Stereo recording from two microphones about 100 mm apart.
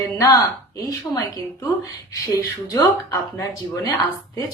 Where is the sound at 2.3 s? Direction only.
25° left (ahead or behind).